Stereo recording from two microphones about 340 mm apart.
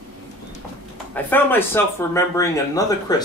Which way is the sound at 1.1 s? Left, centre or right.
Centre.